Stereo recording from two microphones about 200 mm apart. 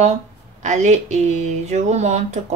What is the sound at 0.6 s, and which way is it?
Speech, 35° right (ahead or behind).